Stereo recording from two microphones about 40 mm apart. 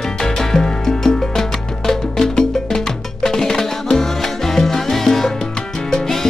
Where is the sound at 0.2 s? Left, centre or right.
Centre.